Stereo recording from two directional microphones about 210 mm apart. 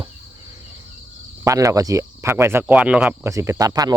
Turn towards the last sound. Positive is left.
turn(degrees=-15)  # may be behind; listen again after turning